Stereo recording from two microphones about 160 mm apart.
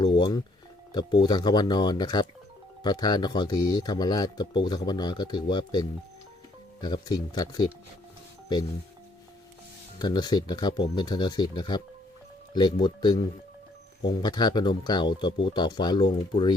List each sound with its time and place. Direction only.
0.0 s speech: 30° left (ahead or behind)
10.0 s speech: 25° left (ahead or behind)